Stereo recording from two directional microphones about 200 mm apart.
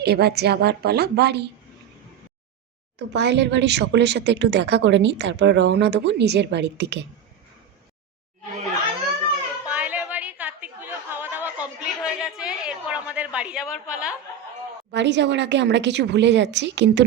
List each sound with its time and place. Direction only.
0.0 s speech: 55° right (ahead or behind)
3.1 s speech: 60° right (ahead or behind)
9.6 s chatter: 5° right (ahead or behind)
14.9 s speech: 60° right (ahead or behind)